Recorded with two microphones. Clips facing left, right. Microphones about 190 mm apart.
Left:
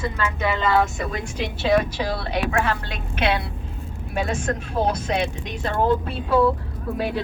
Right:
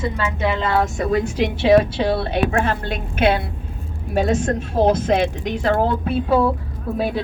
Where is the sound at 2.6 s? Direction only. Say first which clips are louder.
Right 3 dB; 50° right (ahead or behind).